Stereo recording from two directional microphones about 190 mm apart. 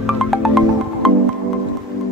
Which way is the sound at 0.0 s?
Centre (ahead or behind).